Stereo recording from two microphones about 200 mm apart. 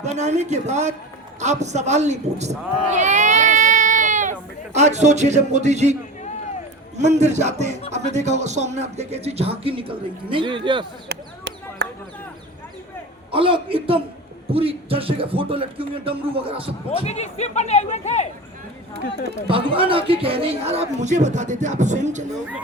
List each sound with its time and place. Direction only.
0.2 s speech: 35° right (ahead or behind)
7.0 s speech: 35° right (ahead or behind)
11.1 s a sound: 60° right (ahead or behind)
13.3 s speech: 25° right (ahead or behind)
16.9 s speech: 30° left (ahead or behind)
19.5 s speech: 25° right (ahead or behind)